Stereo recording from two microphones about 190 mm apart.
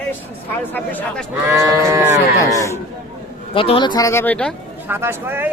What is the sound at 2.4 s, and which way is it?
Speech, 15° left (ahead or behind).